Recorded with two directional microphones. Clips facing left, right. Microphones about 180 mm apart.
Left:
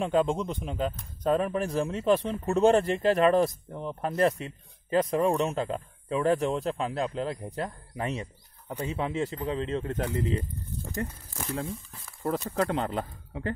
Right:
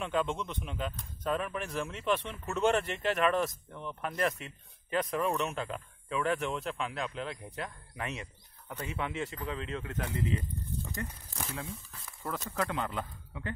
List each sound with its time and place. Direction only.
0.0 s speech: 35° left (ahead or behind)
11.5 s speech: 35° left (ahead or behind)